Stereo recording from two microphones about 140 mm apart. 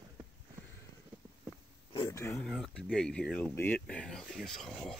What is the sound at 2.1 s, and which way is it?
Speech, 20° left (ahead or behind).